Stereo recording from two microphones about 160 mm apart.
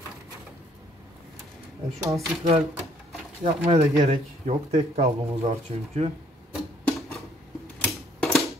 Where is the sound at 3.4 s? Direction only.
40° right (ahead or behind).